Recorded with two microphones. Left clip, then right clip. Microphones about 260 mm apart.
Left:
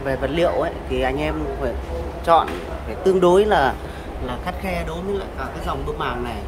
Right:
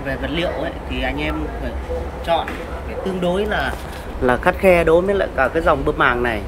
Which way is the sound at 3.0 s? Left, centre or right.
Centre.